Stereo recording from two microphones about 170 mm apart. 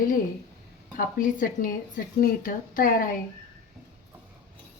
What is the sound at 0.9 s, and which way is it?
A woman's voice, 50° left (ahead or behind).